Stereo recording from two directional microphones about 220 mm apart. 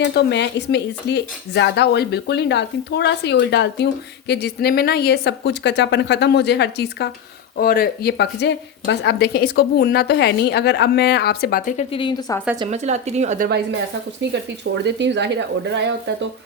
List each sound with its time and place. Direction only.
0.0 s a woman's voice: 50° left (ahead or behind)
11.9 s a woman's voice: 20° left (ahead or behind)
12.7 s a woman's voice: 30° right (ahead or behind)
14.8 s speech: 55° right (ahead or behind)